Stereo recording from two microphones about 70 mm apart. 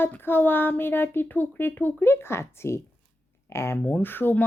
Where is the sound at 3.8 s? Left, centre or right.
Left.